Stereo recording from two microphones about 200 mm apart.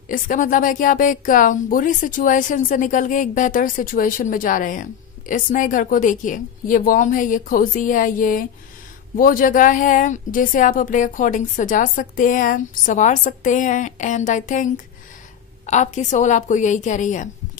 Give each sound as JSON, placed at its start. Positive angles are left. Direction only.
{"t": 0.1, "sound": "a woman's voice", "side_deg": 40}